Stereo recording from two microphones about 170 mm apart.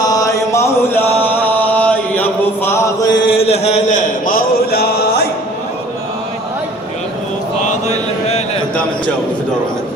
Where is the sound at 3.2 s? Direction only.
35° left (ahead or behind); by 5.2 s 70° left (ahead or behind).